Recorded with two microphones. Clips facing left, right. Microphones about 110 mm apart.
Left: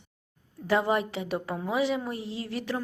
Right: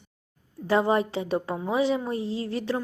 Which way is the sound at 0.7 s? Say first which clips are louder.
Right 3 dB; 30° right (ahead or behind).